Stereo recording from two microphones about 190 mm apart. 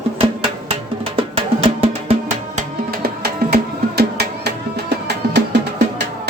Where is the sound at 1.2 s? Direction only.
25° right (ahead or behind).